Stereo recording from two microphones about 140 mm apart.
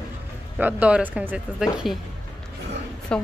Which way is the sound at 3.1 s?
5° left (ahead or behind).